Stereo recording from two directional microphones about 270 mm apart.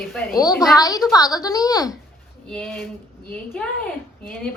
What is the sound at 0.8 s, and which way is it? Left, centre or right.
A woman's voice, centre.